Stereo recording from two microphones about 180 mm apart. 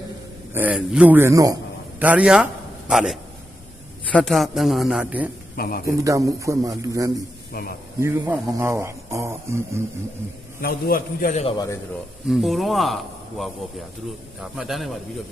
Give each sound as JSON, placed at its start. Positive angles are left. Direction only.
{"t": 0.5, "sound": "a man's voice", "side_deg": -10}
{"t": 5.5, "sound": "a man's voice", "side_deg": 55}
{"t": 5.8, "sound": "speech", "side_deg": -20}
{"t": 7.5, "sound": "a man's voice", "side_deg": 60}
{"t": 7.9, "sound": "speech", "side_deg": -15}
{"t": 10.6, "sound": "a man's voice", "side_deg": 55}
{"t": 11.3, "sound": "a man's voice", "side_deg": 25}
{"t": 12.3, "sound": "speech", "side_deg": 0}
{"t": 14.3, "sound": "speech", "side_deg": -5}